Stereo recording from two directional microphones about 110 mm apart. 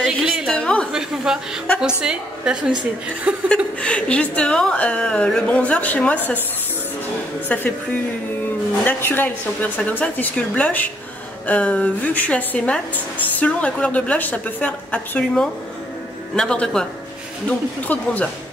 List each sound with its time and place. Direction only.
0.0 s a sound: 5° right (ahead or behind)
0.5 s a sound: 5° left (ahead or behind)
0.9 s a woman's voice: 5° right (ahead or behind)
3.4 s a woman's voice: 10° left (ahead or behind)
7.4 s a woman's voice: 15° left (ahead or behind)
8.8 s a woman's voice: 20° left (ahead or behind)